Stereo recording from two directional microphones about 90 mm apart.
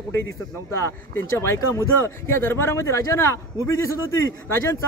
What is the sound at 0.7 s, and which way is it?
A man's voice, 30° left (ahead or behind).